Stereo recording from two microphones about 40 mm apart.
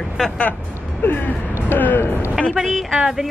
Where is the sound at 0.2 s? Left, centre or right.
Centre.